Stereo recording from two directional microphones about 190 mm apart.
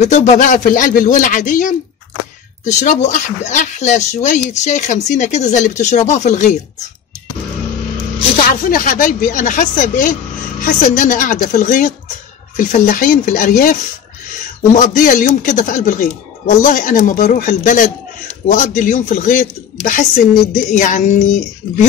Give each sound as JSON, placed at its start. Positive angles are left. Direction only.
{"t": 0.0, "sound": "speech", "side_deg": 40}
{"t": 2.8, "sound": "a woman's voice", "side_deg": 40}
{"t": 8.6, "sound": "speech", "side_deg": 45}
{"t": 14.8, "sound": "a woman's voice", "side_deg": 40}